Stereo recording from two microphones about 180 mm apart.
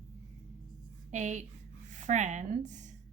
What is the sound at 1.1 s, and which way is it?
A woman's voice, 40° right (ahead or behind).